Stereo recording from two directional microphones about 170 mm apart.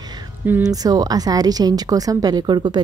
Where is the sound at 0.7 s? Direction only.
20° right (ahead or behind).